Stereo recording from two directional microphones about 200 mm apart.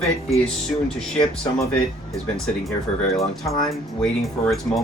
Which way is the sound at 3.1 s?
Centre (ahead or behind).